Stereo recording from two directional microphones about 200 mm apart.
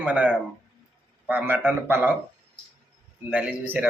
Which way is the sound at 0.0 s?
5° right (ahead or behind).